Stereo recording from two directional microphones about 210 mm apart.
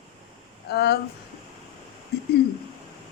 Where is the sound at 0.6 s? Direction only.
50° left (ahead or behind).